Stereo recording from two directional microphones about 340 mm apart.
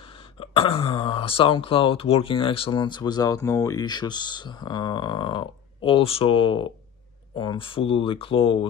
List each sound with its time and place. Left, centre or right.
0.4 s speech: centre